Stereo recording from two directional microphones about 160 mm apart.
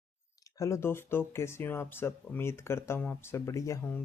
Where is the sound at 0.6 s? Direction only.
15° left (ahead or behind).